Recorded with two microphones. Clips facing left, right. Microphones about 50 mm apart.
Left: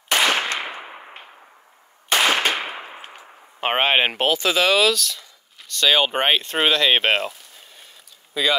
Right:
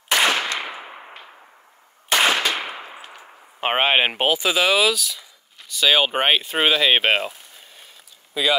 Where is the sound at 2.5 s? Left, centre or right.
Left.